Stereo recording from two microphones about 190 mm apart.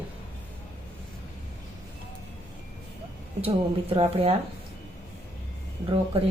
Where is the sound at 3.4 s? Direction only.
30° right (ahead or behind).